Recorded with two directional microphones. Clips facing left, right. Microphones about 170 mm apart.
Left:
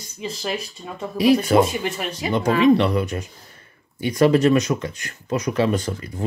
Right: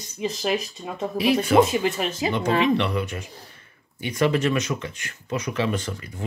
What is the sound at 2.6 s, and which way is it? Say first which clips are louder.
Speech: left 6 dB; 40° left (ahead or behind).